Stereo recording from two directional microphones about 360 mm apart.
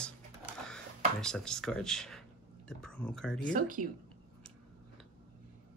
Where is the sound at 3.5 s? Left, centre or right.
Right.